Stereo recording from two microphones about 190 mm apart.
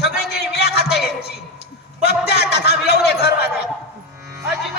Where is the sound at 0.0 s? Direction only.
60° left (ahead or behind).